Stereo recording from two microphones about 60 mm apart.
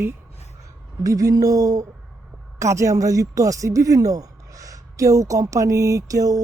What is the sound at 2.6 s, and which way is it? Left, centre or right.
A woman's voice, right.